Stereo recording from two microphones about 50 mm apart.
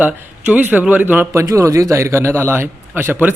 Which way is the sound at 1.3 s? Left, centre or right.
Right.